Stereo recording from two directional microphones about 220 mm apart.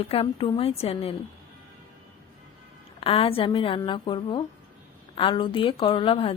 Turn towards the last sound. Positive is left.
turn(degrees=25)  # may be behind; listen again after turning